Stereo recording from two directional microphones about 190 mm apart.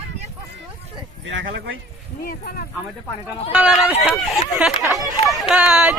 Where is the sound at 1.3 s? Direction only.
75° right (ahead or behind).